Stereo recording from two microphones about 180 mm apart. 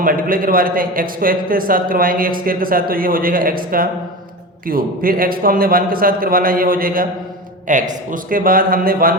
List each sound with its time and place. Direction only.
0.0 s a man's voice: 50° right (ahead or behind)